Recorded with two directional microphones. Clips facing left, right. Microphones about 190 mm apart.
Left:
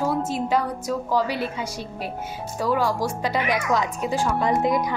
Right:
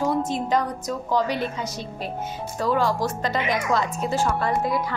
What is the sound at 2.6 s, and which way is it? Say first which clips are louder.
A woman's voice: even; 10° left (ahead or behind).